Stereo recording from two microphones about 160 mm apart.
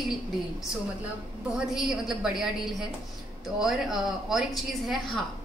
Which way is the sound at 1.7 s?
5° right (ahead or behind).